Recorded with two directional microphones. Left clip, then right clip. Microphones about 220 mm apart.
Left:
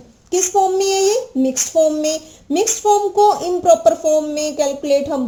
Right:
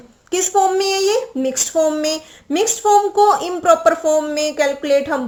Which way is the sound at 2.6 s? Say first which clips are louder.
Right 2 dB; 20° right (ahead or behind).